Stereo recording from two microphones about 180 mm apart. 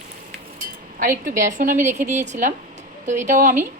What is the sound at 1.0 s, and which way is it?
A woman's voice, 50° right (ahead or behind).